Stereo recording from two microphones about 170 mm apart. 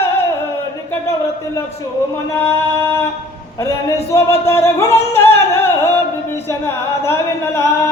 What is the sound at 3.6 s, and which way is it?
Singing, 20° left (ahead or behind).